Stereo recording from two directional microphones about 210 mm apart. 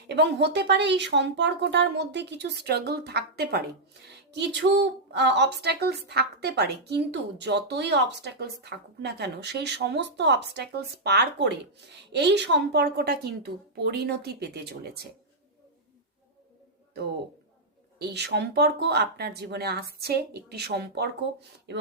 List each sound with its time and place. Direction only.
0.1 s a woman's voice: 55° right (ahead or behind)
18.0 s speech: 55° right (ahead or behind)